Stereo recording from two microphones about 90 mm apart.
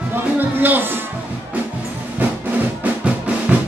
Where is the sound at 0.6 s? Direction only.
20° right (ahead or behind).